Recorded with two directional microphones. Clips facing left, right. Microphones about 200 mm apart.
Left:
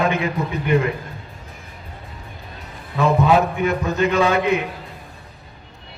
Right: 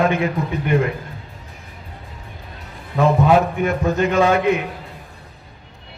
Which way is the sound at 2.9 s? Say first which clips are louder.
Right 1 dB; 50° right (ahead or behind).